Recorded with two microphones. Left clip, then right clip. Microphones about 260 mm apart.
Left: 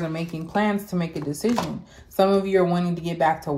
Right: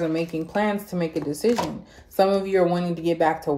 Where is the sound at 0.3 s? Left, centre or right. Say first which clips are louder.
Even; centre.